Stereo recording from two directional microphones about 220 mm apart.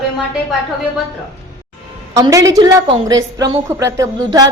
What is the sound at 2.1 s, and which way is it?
A woman's voice, 15° right (ahead or behind).